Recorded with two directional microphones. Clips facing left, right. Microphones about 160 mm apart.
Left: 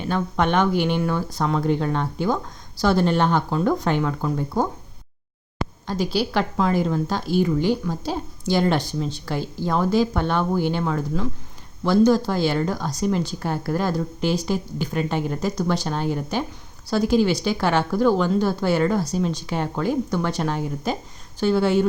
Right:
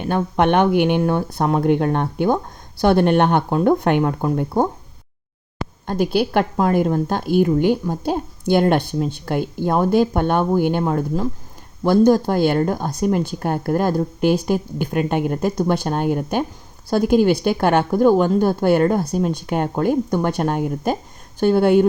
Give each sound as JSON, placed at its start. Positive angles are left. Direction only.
{"t": 0.3, "sound": "speech", "side_deg": -60}
{"t": 5.8, "sound": "a woman's voice", "side_deg": -55}